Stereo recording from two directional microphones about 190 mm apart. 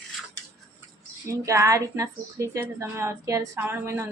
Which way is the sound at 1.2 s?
15° right (ahead or behind).